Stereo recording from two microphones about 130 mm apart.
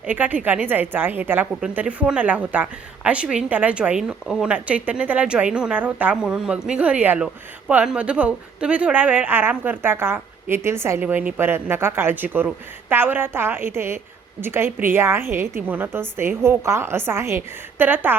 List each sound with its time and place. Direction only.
0.0 s a woman's voice: 10° right (ahead or behind)